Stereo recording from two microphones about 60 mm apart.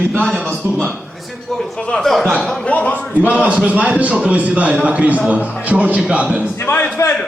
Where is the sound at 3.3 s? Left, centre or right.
Centre.